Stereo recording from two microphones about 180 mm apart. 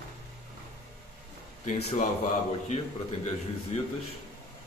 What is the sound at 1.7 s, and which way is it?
Speech, 40° left (ahead or behind).